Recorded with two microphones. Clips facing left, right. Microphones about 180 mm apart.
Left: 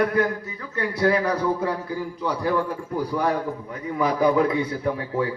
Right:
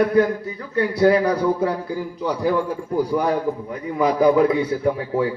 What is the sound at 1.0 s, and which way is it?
A man's voice, 30° right (ahead or behind).